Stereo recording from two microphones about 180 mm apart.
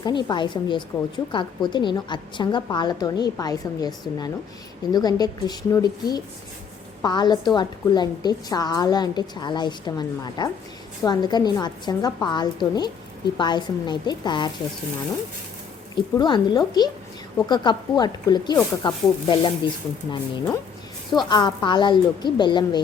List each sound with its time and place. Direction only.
0.0 s a woman's voice: 25° left (ahead or behind)
16.1 s a woman's voice: 25° left (ahead or behind)